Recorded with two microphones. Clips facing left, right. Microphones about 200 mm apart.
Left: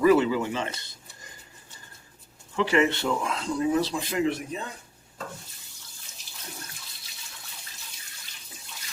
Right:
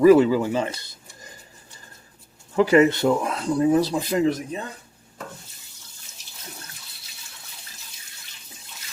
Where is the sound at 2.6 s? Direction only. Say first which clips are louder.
Right 7 dB; 40° right (ahead or behind).